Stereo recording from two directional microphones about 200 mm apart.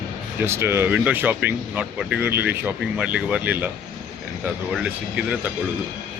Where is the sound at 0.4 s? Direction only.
15° right (ahead or behind).